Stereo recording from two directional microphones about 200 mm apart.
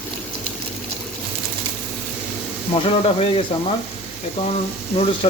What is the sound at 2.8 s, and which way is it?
Speech, 30° left (ahead or behind).